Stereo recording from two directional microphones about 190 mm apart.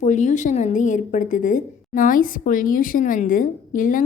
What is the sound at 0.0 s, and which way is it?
A woman's voice, 40° left (ahead or behind).